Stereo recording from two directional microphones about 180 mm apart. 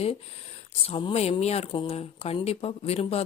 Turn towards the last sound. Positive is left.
turn(degrees=35)  # may be behind; listen again after turning